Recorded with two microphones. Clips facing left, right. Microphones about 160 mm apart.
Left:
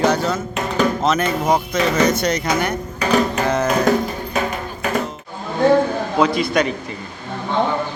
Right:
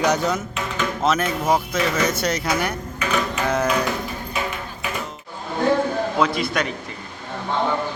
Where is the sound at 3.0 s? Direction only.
35° left (ahead or behind).